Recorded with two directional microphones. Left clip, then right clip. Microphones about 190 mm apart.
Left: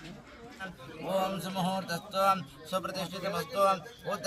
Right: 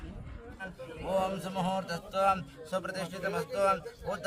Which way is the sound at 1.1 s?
30° right (ahead or behind).